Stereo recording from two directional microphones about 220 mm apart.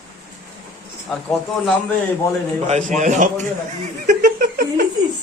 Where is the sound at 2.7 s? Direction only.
35° right (ahead or behind).